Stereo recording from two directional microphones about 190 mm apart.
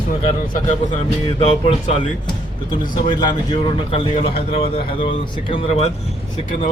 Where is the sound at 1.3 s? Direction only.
30° left (ahead or behind).